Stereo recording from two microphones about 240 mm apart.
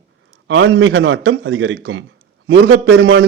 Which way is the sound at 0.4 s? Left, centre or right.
Right.